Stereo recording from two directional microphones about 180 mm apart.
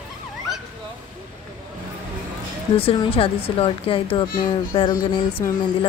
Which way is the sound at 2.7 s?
30° left (ahead or behind).